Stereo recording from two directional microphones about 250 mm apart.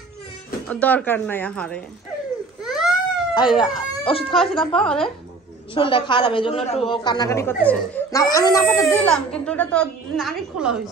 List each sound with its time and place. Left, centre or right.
0.7 s a woman's voice: centre
2.6 s baby cry: centre
3.3 s speech: centre
4.3 s a woman's voice: centre
5.8 s a woman's voice: centre